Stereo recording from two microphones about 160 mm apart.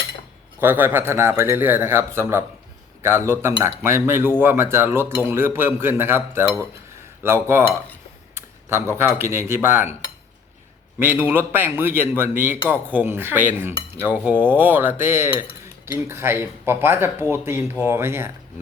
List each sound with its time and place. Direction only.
0.6 s speech: 15° right (ahead or behind)
11.0 s speech: 15° right (ahead or behind)